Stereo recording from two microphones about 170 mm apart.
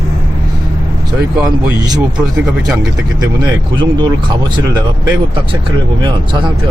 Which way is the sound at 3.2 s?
25° right (ahead or behind).